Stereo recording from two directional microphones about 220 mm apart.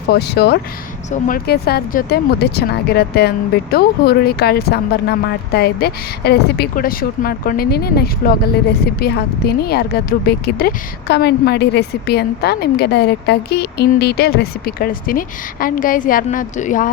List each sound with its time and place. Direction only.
0.1 s a woman's voice: 50° left (ahead or behind)